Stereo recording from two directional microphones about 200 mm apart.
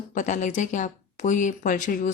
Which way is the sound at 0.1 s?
40° left (ahead or behind).